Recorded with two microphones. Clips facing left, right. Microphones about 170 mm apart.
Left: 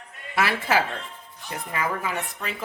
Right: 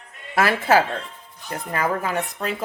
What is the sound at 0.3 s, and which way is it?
Speech, 45° right (ahead or behind).